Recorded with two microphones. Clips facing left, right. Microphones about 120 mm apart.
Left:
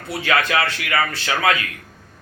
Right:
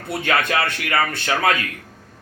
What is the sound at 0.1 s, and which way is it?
Speech, 45° right (ahead or behind).